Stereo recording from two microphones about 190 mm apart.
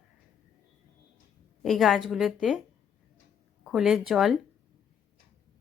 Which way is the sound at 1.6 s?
Centre (ahead or behind).